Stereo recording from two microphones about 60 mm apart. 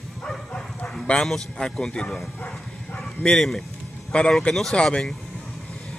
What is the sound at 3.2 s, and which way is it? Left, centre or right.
Speech, centre.